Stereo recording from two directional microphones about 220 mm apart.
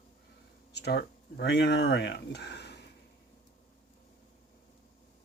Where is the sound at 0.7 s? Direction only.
50° left (ahead or behind).